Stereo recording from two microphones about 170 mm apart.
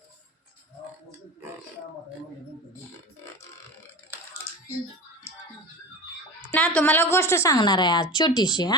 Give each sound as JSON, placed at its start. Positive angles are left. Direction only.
{"t": 6.5, "sound": "a woman's voice", "side_deg": 10}